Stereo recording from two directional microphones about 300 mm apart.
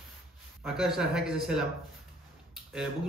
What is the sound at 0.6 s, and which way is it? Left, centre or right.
A man's voice, centre.